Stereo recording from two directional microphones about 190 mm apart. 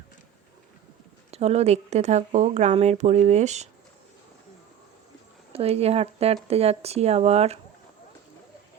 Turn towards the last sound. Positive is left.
turn(degrees=-35)  # may be behind; listen again after turning